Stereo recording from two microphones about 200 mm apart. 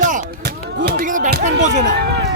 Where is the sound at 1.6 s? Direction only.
40° right (ahead or behind).